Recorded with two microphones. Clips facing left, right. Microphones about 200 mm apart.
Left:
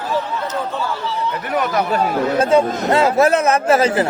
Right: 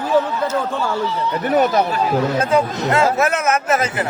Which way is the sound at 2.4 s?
30° left (ahead or behind).